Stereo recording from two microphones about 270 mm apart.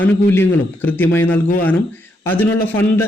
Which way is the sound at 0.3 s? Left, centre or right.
Centre.